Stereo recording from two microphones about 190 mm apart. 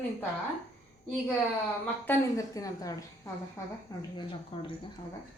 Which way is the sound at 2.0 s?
15° left (ahead or behind).